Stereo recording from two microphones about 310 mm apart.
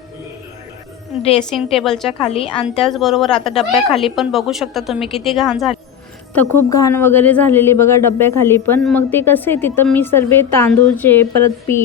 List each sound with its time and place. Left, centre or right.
1.5 s a woman's voice: centre
2.1 s a woman's voice: centre
2.6 s a woman's voice: centre